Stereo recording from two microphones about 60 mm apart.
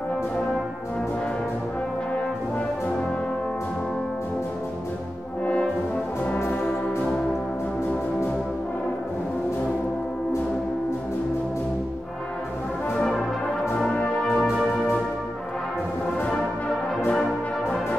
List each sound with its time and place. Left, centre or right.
5.4 s brass instrument: left
14.3 s music: centre
17.1 s brass instrument: centre